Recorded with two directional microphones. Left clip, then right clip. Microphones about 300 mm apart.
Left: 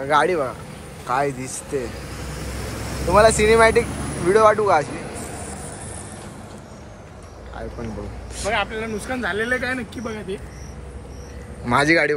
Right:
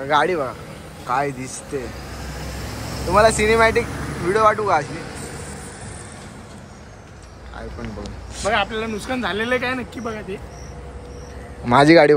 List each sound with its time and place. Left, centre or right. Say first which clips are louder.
0.0 s speech: even; centre
3.1 s speech: left 1 dB; centre
8.5 s speech: right 3 dB; right
9.6 s speech: right 1 dB; centre
11.6 s speech: right 5 dB; centre